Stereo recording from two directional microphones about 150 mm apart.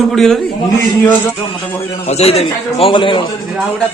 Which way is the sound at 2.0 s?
45° left (ahead or behind).